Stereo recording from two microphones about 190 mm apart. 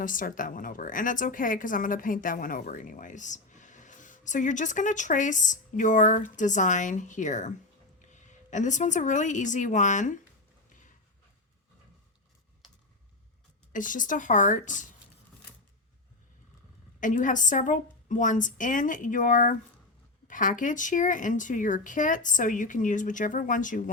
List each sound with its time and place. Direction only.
0.0 s a woman's voice: 45° left (ahead or behind)
13.7 s a woman's voice: 45° left (ahead or behind)
17.0 s a woman's voice: 40° left (ahead or behind)